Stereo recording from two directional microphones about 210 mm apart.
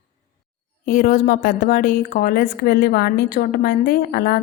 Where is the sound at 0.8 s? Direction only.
40° left (ahead or behind).